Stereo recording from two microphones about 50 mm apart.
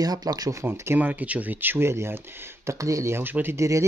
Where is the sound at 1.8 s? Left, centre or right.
Right.